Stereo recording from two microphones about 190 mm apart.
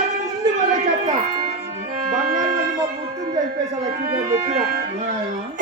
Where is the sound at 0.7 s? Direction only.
40° right (ahead or behind).